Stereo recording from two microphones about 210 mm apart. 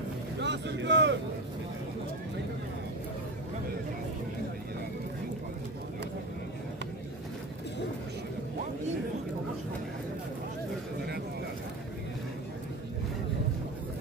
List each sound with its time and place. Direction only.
0.4 s speech: 55° right (ahead or behind)